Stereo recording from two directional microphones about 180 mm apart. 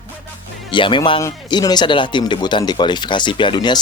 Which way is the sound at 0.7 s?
25° left (ahead or behind).